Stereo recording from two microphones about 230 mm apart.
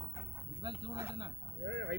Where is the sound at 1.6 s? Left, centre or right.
Right.